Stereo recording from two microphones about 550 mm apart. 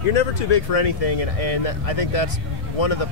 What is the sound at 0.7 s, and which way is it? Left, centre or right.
Speech, left.